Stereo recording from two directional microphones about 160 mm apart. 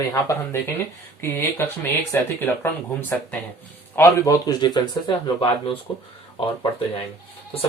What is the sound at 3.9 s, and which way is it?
Speech, 15° left (ahead or behind).